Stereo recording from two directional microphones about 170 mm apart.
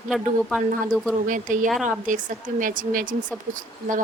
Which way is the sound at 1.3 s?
50° right (ahead or behind).